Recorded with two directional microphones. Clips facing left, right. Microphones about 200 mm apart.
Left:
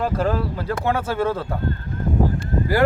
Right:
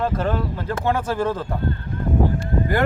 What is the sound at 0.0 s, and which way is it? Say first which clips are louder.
Speech: left 1 dB; 10° left (ahead or behind).